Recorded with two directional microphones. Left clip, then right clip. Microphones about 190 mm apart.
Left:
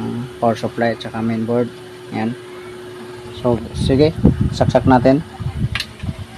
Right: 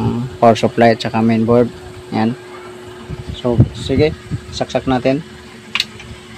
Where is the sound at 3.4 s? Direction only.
5° right (ahead or behind).